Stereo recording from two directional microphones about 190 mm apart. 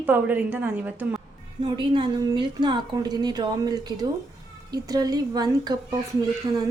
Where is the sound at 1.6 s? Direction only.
25° right (ahead or behind).